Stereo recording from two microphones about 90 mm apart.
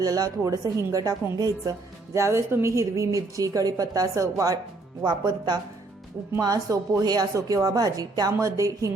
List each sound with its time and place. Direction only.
0.0 s a woman's voice: 45° right (ahead or behind)
5.0 s speech: 55° right (ahead or behind)
6.4 s a woman's voice: 40° right (ahead or behind)